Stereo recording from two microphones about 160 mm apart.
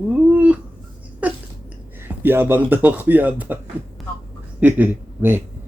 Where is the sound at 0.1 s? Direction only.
10° right (ahead or behind).